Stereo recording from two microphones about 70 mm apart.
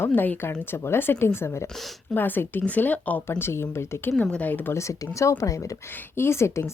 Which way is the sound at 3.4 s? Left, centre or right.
Left.